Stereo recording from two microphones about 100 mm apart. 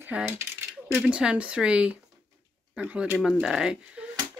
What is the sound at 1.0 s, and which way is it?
Speech, 10° right (ahead or behind).